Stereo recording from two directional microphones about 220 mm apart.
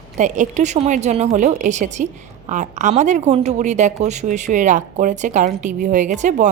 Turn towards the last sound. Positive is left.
turn(degrees=-35)  # may be behind; listen again after turning